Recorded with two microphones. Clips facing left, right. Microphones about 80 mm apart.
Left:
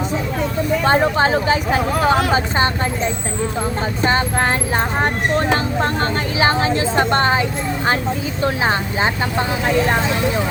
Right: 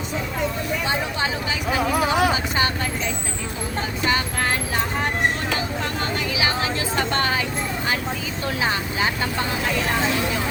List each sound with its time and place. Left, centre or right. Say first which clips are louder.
0.9 s speech: left 12 dB; left
2.3 s speech: left 5 dB; left
8.4 s speech: left 5 dB; left